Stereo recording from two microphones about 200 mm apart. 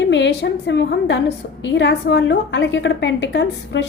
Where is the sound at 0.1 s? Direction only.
60° left (ahead or behind).